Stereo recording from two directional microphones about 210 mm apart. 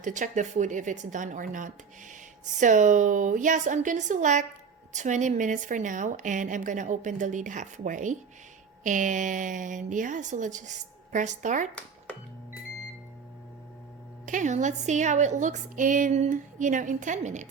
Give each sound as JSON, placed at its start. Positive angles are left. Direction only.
{"t": 0.0, "sound": "speech", "side_deg": -35}
{"t": 14.3, "sound": "speech", "side_deg": -35}